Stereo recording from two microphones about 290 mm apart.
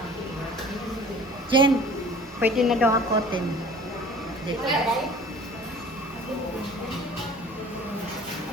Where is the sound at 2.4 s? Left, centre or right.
Centre.